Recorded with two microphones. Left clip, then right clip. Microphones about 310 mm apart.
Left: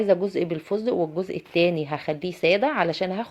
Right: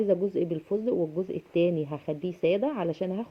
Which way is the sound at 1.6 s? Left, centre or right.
Left.